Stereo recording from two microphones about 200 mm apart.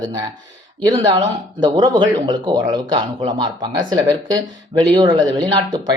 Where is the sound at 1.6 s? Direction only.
20° right (ahead or behind).